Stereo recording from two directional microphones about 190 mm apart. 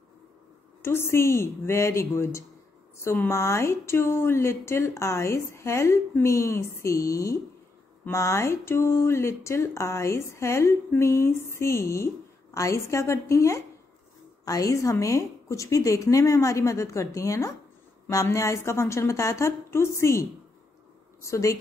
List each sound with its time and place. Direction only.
0.8 s speech: 15° left (ahead or behind)